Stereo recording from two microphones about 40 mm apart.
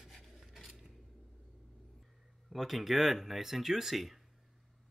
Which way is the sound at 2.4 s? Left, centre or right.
Centre.